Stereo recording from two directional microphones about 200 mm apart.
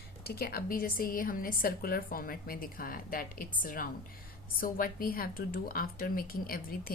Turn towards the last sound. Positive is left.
turn(degrees=45)  # may be behind; listen again after turning